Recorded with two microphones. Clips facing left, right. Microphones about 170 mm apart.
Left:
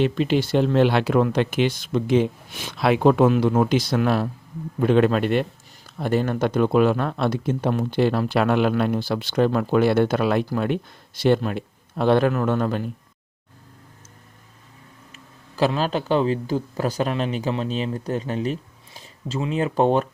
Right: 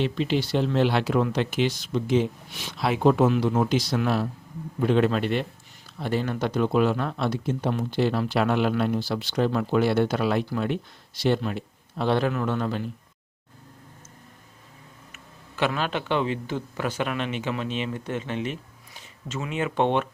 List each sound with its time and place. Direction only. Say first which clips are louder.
0.0 s speech: left 4 dB; 50° left (ahead or behind)
15.1 s speech: left 3 dB; 35° left (ahead or behind)